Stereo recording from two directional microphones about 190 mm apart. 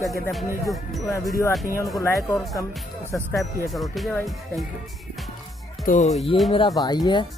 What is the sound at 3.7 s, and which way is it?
Speech, centre (ahead or behind).